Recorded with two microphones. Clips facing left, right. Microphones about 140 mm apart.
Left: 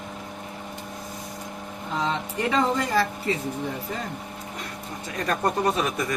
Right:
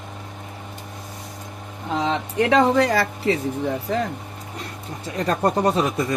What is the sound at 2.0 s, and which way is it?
Speech, 80° right.